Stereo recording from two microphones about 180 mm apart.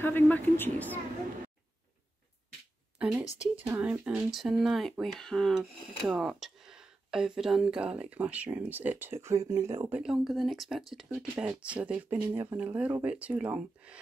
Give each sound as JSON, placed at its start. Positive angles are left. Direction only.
{"t": 0.0, "sound": "a woman's voice", "side_deg": 10}
{"t": 3.3, "sound": "speech", "side_deg": -10}
{"t": 9.9, "sound": "speech", "side_deg": -5}